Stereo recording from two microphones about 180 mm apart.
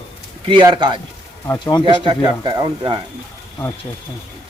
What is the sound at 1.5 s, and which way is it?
Speech, 20° left (ahead or behind).